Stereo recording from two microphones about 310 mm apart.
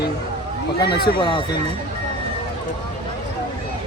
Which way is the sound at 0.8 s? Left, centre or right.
Left.